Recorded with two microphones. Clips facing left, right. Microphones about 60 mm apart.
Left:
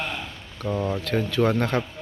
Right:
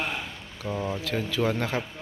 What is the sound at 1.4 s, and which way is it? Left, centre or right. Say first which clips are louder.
Speech: left 4 dB; centre.